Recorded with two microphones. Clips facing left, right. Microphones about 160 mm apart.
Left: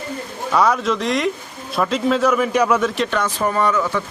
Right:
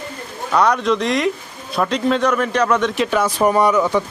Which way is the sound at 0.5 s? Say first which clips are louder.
Right 1 dB; centre (ahead or behind).